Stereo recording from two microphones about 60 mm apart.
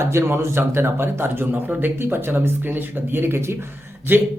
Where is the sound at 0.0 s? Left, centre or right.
Right.